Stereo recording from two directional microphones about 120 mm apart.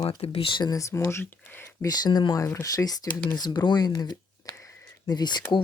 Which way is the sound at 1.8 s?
35° left (ahead or behind).